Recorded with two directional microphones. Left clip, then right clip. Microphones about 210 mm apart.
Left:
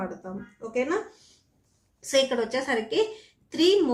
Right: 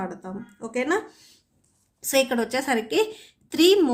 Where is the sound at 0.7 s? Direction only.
35° right (ahead or behind).